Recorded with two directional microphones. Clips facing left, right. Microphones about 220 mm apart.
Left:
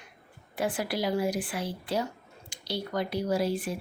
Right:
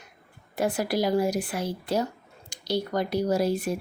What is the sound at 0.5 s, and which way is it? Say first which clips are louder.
Speech: right 4 dB; 40° right (ahead or behind).